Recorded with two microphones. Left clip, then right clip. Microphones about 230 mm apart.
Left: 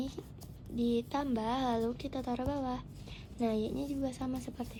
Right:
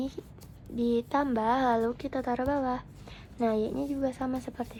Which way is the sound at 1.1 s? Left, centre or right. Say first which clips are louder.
Right 7 dB; right.